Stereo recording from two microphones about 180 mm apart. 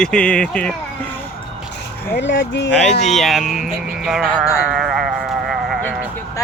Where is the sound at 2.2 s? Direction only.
85° left.